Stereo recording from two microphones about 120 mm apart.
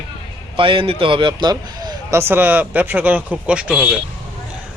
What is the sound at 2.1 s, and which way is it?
A man's voice, 20° right (ahead or behind).